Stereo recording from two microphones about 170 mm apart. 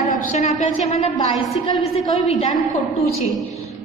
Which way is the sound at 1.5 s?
Centre (ahead or behind).